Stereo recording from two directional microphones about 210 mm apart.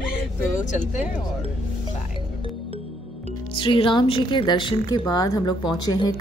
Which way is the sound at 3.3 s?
25° left (ahead or behind).